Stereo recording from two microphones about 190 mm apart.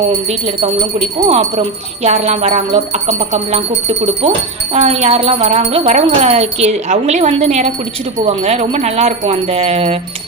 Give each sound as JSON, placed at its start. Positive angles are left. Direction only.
{"t": 0.3, "sound": "speech", "side_deg": -35}